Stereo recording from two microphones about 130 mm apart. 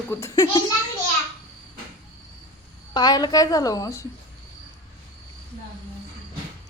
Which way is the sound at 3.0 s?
35° left (ahead or behind).